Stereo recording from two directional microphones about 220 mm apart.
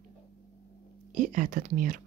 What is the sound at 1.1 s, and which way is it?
Speech, 35° right (ahead or behind).